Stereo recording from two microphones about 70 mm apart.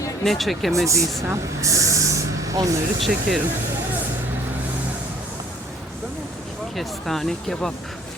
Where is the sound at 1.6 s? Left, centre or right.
Right.